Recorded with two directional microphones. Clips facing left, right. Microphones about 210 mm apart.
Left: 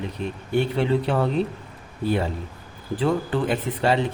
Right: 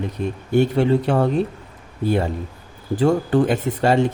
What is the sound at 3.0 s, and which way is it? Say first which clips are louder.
Speech: right 6 dB; 45° right (ahead or behind).